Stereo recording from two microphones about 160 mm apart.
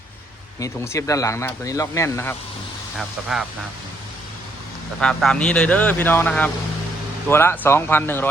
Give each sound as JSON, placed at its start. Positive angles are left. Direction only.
{"t": 0.6, "sound": "speech", "side_deg": 20}
{"t": 3.0, "sound": "speech", "side_deg": -5}
{"t": 4.9, "sound": "speech", "side_deg": 5}